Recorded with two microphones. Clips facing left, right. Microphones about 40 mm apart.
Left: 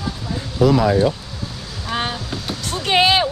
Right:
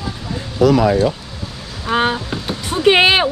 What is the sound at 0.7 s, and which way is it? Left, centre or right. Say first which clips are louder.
Speech: right 2 dB; right.